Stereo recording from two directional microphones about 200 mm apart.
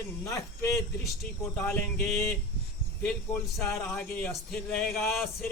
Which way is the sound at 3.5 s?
5° left (ahead or behind).